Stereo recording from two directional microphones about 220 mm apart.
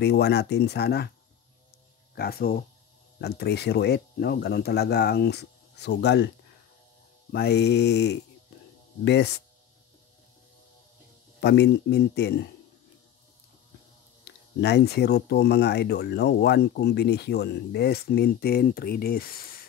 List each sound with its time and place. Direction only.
0.0 s speech: 50° left (ahead or behind)
2.1 s speech: 45° left (ahead or behind)
7.3 s speech: 50° left (ahead or behind)
11.4 s speech: 50° left (ahead or behind)
14.2 s speech: 50° left (ahead or behind)